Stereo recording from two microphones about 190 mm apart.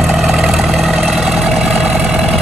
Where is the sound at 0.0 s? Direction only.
Centre (ahead or behind).